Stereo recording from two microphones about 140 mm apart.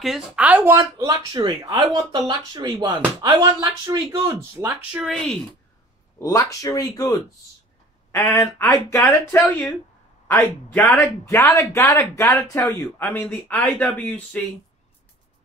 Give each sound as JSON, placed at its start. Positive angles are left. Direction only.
{"t": 0.0, "sound": "speech", "side_deg": 0}
{"t": 0.5, "sound": "speech", "side_deg": -15}
{"t": 4.9, "sound": "speech", "side_deg": 0}
{"t": 6.1, "sound": "speech", "side_deg": 25}